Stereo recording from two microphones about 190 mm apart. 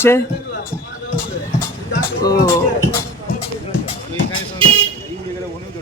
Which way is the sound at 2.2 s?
20° left (ahead or behind).